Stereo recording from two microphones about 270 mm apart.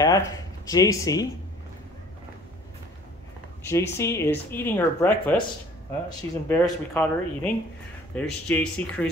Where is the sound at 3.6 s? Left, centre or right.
Centre.